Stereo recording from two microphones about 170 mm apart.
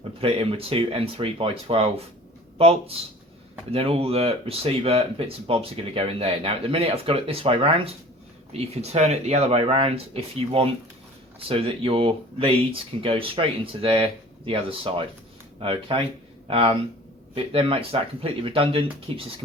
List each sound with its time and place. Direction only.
0.2 s speech: 35° right (ahead or behind)